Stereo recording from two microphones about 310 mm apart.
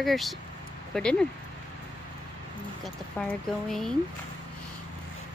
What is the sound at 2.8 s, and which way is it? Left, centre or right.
Speech, centre.